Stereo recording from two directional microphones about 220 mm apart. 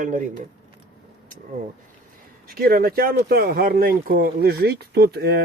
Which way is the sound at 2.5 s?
45° right (ahead or behind).